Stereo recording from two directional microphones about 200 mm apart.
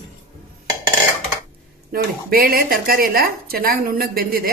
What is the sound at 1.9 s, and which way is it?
Speech, 45° right (ahead or behind).